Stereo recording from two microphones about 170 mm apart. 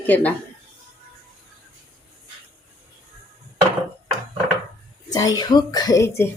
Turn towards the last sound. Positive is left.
turn(degrees=15)  # may be behind; listen again after turning